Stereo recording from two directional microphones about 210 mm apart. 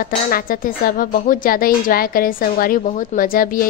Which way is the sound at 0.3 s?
45° left (ahead or behind).